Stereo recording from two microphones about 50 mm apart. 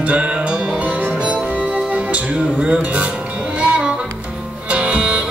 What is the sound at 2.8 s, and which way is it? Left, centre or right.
Music, right.